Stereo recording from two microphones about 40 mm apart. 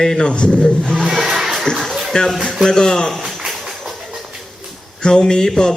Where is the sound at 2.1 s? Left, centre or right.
Left.